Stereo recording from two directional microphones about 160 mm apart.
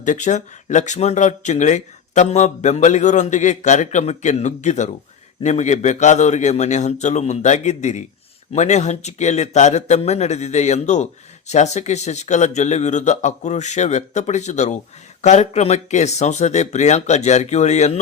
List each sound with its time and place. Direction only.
0.0 s speech: 50° left (ahead or behind)